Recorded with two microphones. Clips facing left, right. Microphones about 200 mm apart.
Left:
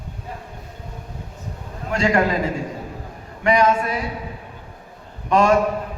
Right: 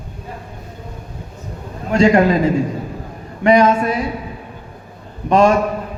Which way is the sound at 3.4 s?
25° right (ahead or behind).